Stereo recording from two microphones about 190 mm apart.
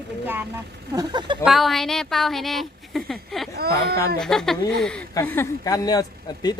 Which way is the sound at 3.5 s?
55° right (ahead or behind).